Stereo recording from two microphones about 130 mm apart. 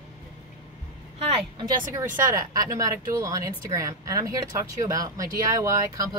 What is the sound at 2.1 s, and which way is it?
A woman's voice, 25° right (ahead or behind).